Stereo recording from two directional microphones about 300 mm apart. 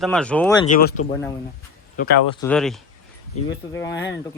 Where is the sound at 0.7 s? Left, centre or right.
Left.